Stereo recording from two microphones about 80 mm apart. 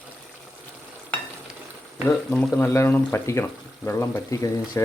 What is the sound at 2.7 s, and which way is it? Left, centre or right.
Speech, left.